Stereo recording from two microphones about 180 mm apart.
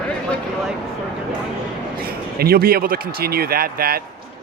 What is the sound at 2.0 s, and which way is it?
A man's voice, 55° right (ahead or behind).